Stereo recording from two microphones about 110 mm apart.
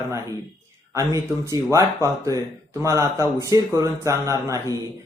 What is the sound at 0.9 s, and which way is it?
Speech, 30° right (ahead or behind).